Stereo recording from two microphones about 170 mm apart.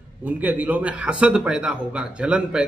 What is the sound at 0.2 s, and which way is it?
A man's voice, 10° right (ahead or behind).